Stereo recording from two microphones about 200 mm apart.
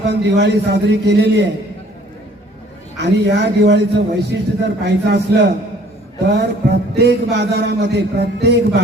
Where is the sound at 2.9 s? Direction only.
60° right (ahead or behind).